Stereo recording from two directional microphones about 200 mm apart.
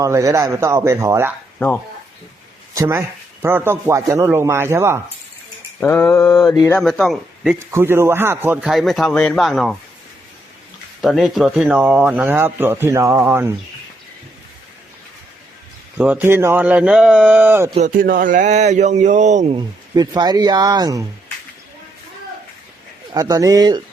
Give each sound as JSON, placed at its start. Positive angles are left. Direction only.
{"t": 0.0, "sound": "speech", "side_deg": -15}
{"t": 1.5, "sound": "speech", "side_deg": 10}
{"t": 2.7, "sound": "speech", "side_deg": -15}
{"t": 5.8, "sound": "speech", "side_deg": 10}
{"t": 7.7, "sound": "speech", "side_deg": -10}
{"t": 11.0, "sound": "speech", "side_deg": 0}
{"t": 16.0, "sound": "speech", "side_deg": -10}
{"t": 17.7, "sound": "speech", "side_deg": -40}
{"t": 19.5, "sound": "speech", "side_deg": -20}
{"t": 23.1, "sound": "speech", "side_deg": -15}